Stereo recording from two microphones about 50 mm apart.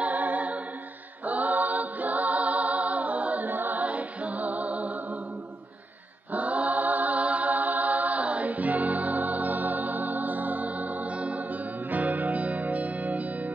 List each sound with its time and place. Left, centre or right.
0.0 s music: right
6.3 s chant: right